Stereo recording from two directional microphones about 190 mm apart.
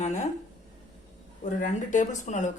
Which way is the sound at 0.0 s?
40° left (ahead or behind).